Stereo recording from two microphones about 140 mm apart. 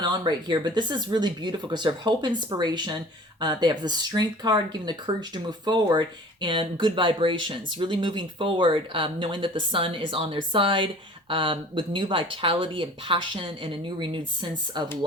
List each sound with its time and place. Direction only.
0.0 s speech: 30° right (ahead or behind)